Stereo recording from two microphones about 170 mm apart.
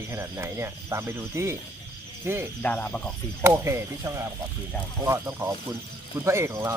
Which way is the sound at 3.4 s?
15° right (ahead or behind).